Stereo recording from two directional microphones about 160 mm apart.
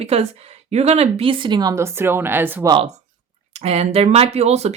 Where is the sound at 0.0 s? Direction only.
40° right (ahead or behind); by 2.6 s 10° right (ahead or behind).